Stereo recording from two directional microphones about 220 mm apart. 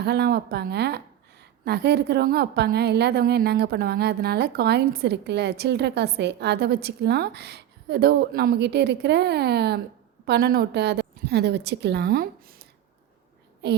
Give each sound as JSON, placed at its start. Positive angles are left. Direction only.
{"t": 0.0, "sound": "a woman's voice", "side_deg": -50}